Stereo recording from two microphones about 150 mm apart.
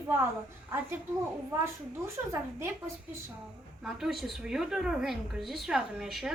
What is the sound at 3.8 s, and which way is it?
A woman's voice, centre (ahead or behind).